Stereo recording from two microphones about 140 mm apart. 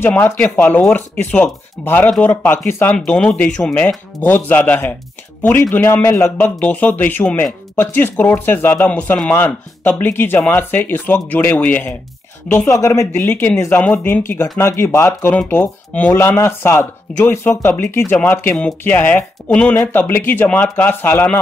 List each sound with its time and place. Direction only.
0.0 s a man's voice: 15° left (ahead or behind)